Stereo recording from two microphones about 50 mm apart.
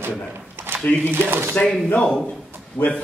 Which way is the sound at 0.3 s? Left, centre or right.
Right.